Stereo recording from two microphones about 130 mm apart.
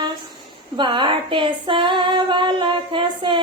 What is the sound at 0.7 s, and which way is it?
Female singing, 35° right (ahead or behind).